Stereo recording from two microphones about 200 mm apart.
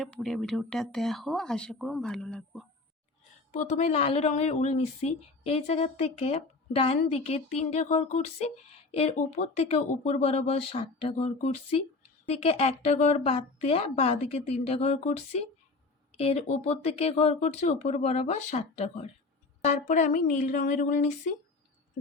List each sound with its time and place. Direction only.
0.0 s speech: centre (ahead or behind)
3.5 s speech: 35° left (ahead or behind)